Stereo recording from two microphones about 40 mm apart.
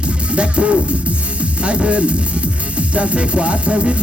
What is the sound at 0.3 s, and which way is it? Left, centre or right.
Speech, right.